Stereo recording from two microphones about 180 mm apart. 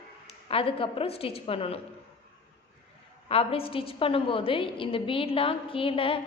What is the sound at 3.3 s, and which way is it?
A woman's voice, 30° left (ahead or behind).